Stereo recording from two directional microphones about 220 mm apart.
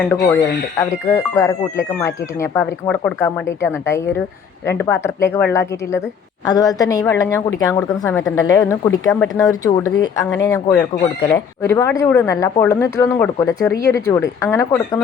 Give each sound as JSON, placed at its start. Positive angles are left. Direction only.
{"t": 0.0, "sound": "speech", "side_deg": 10}